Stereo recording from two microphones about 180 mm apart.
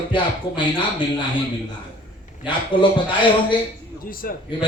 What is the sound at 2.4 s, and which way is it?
A man's voice, 25° left (ahead or behind).